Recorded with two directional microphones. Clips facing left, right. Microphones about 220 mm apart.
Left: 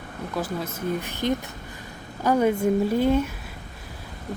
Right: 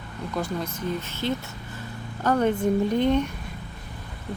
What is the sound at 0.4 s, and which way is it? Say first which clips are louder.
Speech: even; 5° left (ahead or behind).